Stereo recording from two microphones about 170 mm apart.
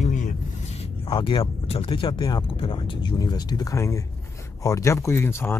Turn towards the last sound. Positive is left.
turn(degrees=15)  # may be behind; listen again after turning